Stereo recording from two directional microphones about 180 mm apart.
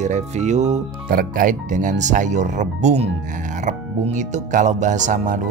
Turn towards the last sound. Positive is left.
turn(degrees=-45)  # may be behind; listen again after turning